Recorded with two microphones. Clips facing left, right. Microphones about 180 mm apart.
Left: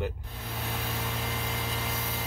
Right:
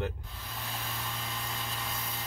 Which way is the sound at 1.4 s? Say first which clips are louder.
Left 5 dB; 70° left (ahead or behind).